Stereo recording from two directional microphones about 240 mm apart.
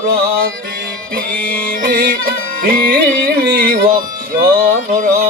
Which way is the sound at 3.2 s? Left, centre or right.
Right.